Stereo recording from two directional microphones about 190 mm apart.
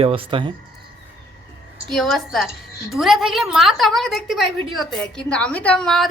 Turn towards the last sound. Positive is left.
turn(degrees=5)  # may be behind; listen again after turning